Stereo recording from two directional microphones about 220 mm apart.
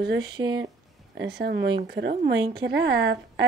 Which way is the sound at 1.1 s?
50° right (ahead or behind).